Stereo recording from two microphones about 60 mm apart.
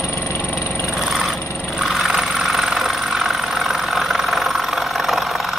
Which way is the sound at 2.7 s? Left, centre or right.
Centre.